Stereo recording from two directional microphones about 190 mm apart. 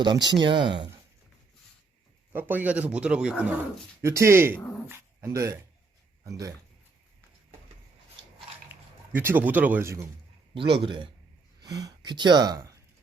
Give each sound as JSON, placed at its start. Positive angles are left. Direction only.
{"t": 0.0, "sound": "speech", "side_deg": -25}
{"t": 2.3, "sound": "speech", "side_deg": -10}
{"t": 8.7, "sound": "speech", "side_deg": -10}
{"t": 10.5, "sound": "speech", "side_deg": -25}